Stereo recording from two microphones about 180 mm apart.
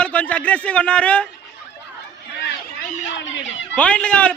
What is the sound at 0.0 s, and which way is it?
Speech, 10° left (ahead or behind).